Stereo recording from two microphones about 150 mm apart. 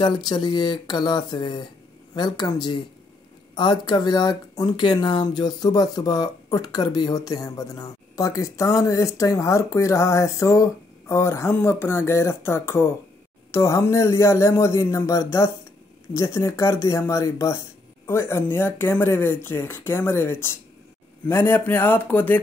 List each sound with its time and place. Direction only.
0.3 s speech: 30° left (ahead or behind); by 22.4 s 10° left (ahead or behind)